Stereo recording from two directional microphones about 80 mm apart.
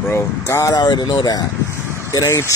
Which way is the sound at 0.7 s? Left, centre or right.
Left.